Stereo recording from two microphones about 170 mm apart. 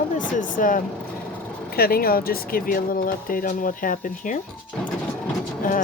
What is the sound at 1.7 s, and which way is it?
Speech, 60° left (ahead or behind).